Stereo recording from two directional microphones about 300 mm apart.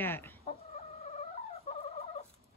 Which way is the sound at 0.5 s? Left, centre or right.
Left.